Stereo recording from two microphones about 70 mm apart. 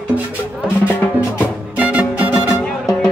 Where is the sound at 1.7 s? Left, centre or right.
Centre.